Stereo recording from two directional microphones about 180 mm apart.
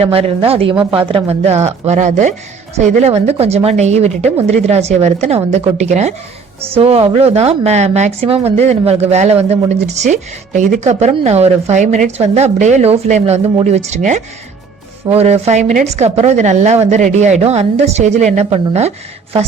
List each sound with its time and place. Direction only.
0.0 s a woman's voice: 30° right (ahead or behind)